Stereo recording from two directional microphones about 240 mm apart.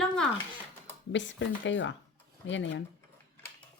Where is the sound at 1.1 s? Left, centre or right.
Left.